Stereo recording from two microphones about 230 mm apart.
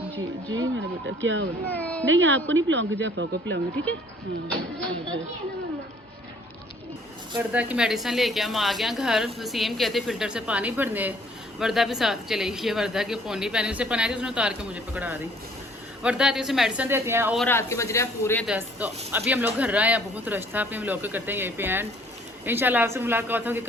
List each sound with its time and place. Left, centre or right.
0.5 s speech: right
1.7 s a woman's voice: centre
2.0 s speech: right
4.8 s a woman's voice: centre
7.3 s a woman's voice: centre
17.4 s speech: centre
18.4 s speech: centre